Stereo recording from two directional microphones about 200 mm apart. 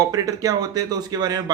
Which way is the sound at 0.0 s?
15° right (ahead or behind).